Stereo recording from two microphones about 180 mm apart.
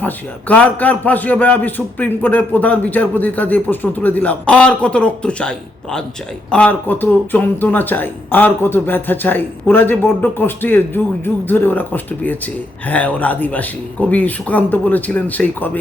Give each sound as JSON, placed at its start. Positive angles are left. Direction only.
{"t": 0.0, "sound": "a man's voice", "side_deg": 10}